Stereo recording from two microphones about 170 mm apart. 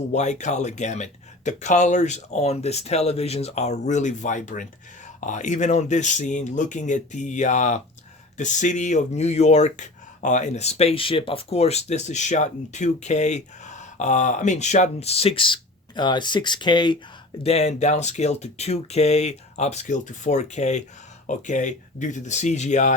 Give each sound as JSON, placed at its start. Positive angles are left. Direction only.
{"t": 0.1, "sound": "speech", "side_deg": 45}
{"t": 17.4, "sound": "speech", "side_deg": 40}